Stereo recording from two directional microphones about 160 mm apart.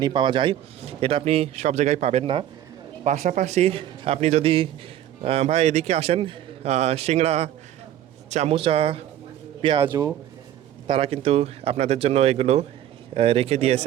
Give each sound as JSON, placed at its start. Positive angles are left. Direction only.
{"t": 0.0, "sound": "speech", "side_deg": -30}
{"t": 3.2, "sound": "a man's voice", "side_deg": -50}
{"t": 10.8, "sound": "speech", "side_deg": -35}